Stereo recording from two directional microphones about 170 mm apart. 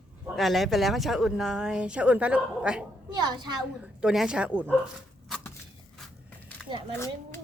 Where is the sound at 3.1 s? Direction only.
25° right (ahead or behind).